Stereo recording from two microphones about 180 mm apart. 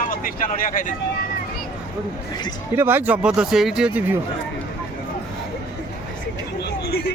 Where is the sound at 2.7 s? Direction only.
10° right (ahead or behind).